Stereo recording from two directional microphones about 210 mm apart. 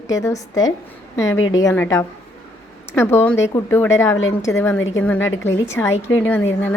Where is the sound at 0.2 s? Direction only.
15° left (ahead or behind).